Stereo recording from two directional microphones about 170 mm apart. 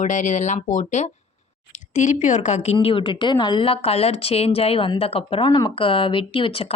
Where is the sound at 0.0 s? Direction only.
45° left (ahead or behind).